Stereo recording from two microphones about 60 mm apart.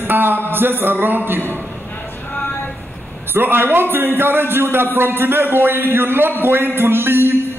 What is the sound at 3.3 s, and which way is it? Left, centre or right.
A man's voice, right.